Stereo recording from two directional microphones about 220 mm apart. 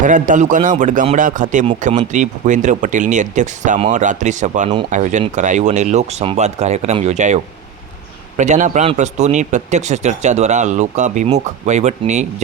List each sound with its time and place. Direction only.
0.0 s speech: 35° right (ahead or behind)